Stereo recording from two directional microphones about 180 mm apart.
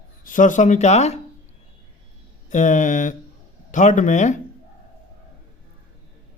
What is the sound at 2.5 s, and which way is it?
Speech, 45° left (ahead or behind).